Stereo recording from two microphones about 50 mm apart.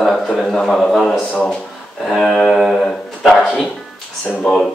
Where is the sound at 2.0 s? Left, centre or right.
Centre.